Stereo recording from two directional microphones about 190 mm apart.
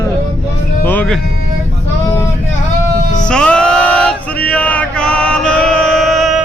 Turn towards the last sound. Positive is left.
turn(degrees=0)  # may be behind; listen again after turning